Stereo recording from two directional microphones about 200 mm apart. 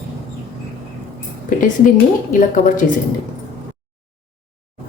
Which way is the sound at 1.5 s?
40° left (ahead or behind).